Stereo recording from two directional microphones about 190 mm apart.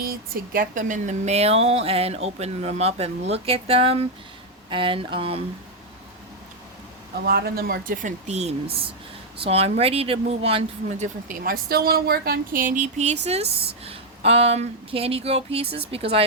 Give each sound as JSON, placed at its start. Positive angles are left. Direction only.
{"t": 0.0, "sound": "speech", "side_deg": -50}
{"t": 7.3, "sound": "speech", "side_deg": -55}
{"t": 11.0, "sound": "speech", "side_deg": -45}
{"t": 11.7, "sound": "speech", "side_deg": -55}